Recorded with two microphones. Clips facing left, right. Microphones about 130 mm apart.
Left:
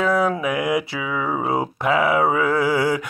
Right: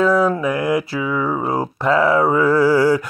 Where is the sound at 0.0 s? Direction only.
15° left (ahead or behind).